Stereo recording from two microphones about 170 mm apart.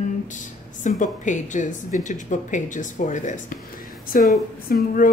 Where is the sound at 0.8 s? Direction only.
50° left (ahead or behind).